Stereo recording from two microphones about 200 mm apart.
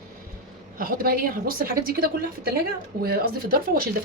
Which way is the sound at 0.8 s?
45° right (ahead or behind).